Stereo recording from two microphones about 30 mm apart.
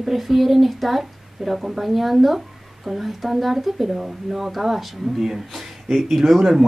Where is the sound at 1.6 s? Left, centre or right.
Centre.